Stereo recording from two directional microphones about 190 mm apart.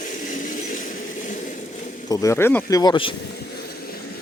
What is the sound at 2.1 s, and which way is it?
Speech, 15° left (ahead or behind).